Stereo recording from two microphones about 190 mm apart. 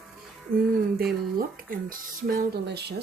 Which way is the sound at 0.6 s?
55° right (ahead or behind).